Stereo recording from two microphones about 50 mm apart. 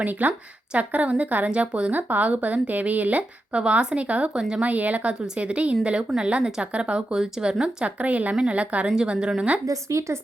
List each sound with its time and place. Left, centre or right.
0.0 s speech: right
1.9 s speech: right
4.4 s speech: centre
4.6 s speech: right; by 7.9 s centre
7.9 s speech: right
9.1 s speech: centre
10.0 s speech: right